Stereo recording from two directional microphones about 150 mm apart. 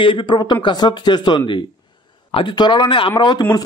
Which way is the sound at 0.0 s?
35° left (ahead or behind).